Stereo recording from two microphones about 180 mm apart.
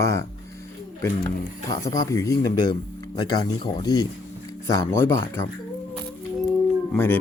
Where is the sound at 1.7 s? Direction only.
20° left (ahead or behind).